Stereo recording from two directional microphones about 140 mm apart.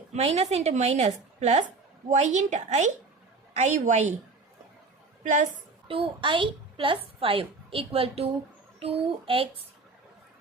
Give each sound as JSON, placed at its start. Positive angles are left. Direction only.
{"t": 0.1, "sound": "a woman's voice", "side_deg": -50}
{"t": 5.2, "sound": "a woman's voice", "side_deg": -60}
{"t": 5.9, "sound": "a child's voice", "side_deg": -40}